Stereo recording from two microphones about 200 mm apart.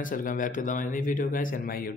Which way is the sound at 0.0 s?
40° left (ahead or behind).